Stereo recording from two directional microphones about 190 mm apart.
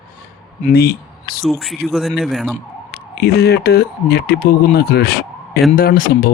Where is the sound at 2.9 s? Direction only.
55° left (ahead or behind).